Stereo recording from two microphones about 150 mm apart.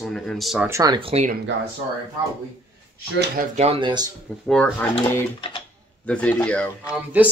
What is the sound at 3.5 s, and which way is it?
Speech, 40° right (ahead or behind).